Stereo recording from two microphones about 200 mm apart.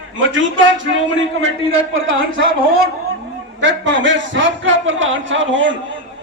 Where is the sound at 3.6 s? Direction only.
65° right (ahead or behind).